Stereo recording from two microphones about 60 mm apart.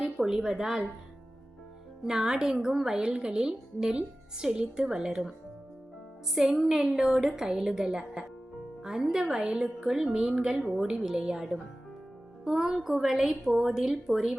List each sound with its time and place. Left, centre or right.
0.0 s a woman's voice: centre
2.0 s a woman's voice: centre
6.3 s a woman's voice: centre